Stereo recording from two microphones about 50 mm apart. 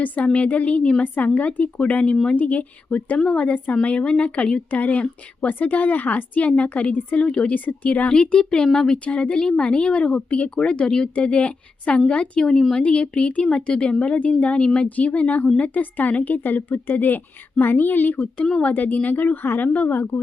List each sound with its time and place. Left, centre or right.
0.3 s a woman's voice: left
7.5 s speech: left; by 8.9 s centre
8.9 s a woman's voice: left
12.4 s speech: centre
12.8 s a woman's voice: left
14.6 s a woman's voice: centre
14.8 s a woman's voice: left